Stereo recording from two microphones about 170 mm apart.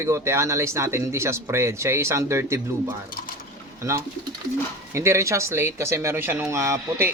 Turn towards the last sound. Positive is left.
turn(degrees=-15)  # may be behind; listen again after turning